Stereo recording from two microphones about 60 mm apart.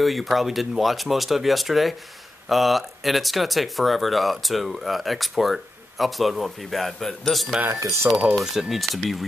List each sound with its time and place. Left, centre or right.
0.0 s speech: centre
8.1 s speech: right
8.4 s speech: centre